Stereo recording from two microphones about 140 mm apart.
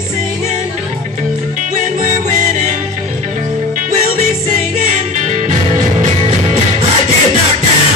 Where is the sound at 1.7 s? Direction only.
70° right (ahead or behind); by 6.9 s 55° right (ahead or behind).